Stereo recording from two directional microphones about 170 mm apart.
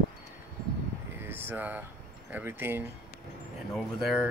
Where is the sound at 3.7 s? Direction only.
Centre (ahead or behind).